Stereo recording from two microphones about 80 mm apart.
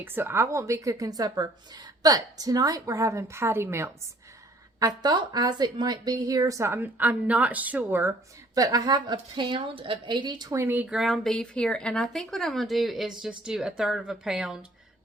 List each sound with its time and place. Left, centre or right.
0.0 s a woman's voice: right
4.8 s a woman's voice: right
6.7 s speech: right
8.5 s a woman's voice: right
10.8 s speech: centre